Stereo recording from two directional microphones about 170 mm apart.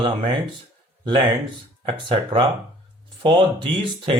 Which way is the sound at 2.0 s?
30° right (ahead or behind).